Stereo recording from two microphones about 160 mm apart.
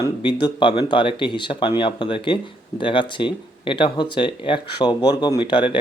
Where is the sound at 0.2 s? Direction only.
30° left (ahead or behind).